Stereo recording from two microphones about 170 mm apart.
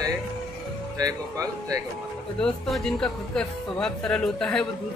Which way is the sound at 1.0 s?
20° right (ahead or behind).